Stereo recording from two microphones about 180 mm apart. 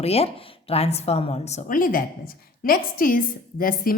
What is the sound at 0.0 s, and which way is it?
A woman's voice, 35° left (ahead or behind).